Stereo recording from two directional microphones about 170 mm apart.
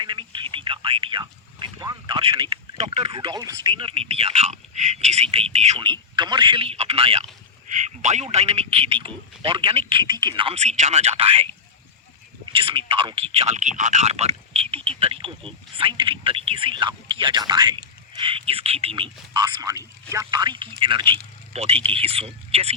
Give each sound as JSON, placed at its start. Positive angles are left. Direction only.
{"t": 0.0, "sound": "a sound", "side_deg": -25}
{"t": 2.7, "sound": "speech", "side_deg": -40}
{"t": 5.8, "sound": "speech", "side_deg": -25}
{"t": 12.5, "sound": "speech", "side_deg": -30}